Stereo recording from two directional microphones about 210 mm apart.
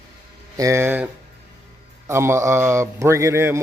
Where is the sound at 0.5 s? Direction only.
15° right (ahead or behind).